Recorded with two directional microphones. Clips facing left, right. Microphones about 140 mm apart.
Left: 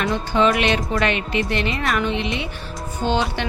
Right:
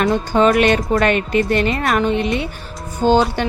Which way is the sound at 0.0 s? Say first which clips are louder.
Right 4 dB; 45° right (ahead or behind).